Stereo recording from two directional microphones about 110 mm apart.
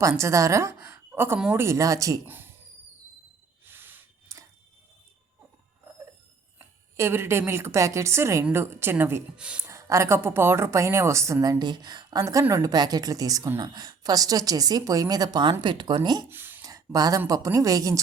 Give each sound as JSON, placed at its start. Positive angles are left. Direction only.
{"t": 0.0, "sound": "a woman's voice", "side_deg": -25}
{"t": 2.2, "sound": "a sound", "side_deg": -20}
{"t": 3.7, "sound": "gasp", "side_deg": -20}
{"t": 6.6, "sound": "a woman's voice", "side_deg": -25}
{"t": 9.4, "sound": "speech", "side_deg": -10}
{"t": 9.6, "sound": "a woman's voice", "side_deg": -25}
{"t": 11.6, "sound": "speech", "side_deg": -40}
{"t": 12.2, "sound": "a woman's voice", "side_deg": -30}
{"t": 16.3, "sound": "a sound", "side_deg": -20}
{"t": 16.6, "sound": "a woman's voice", "side_deg": -35}